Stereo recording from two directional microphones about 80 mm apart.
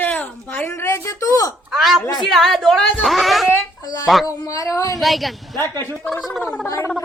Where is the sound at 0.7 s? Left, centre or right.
Left.